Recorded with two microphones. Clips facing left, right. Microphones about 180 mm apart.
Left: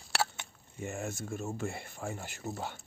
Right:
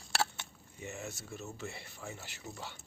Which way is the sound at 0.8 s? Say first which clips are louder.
Left 6 dB; 50° left (ahead or behind).